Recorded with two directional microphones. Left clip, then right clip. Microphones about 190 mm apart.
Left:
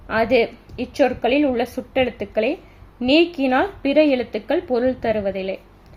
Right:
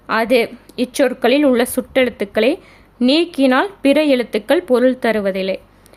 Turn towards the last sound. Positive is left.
turn(degrees=-45)  # may be behind; listen again after turning